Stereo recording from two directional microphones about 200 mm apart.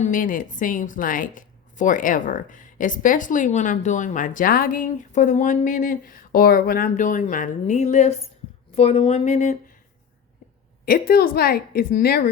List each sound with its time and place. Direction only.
0.0 s a woman's voice: 40° left (ahead or behind)
10.8 s a woman's voice: 50° left (ahead or behind)